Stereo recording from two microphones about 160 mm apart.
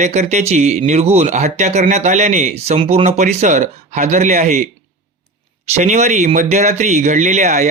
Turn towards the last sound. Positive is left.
turn(degrees=-45)  # may be behind; listen again after turning